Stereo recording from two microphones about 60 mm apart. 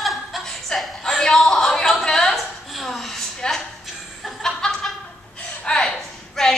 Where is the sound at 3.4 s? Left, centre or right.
Centre.